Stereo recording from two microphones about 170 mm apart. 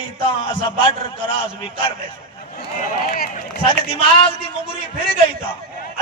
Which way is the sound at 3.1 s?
65° left (ahead or behind).